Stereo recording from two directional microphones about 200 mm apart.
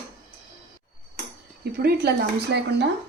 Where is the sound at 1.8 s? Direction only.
55° right (ahead or behind).